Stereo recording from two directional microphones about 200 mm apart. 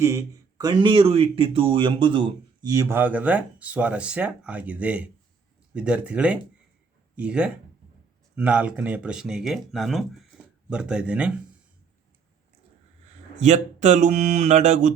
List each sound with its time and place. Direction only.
0.0 s speech: 15° right (ahead or behind)
13.4 s speech: 35° right (ahead or behind)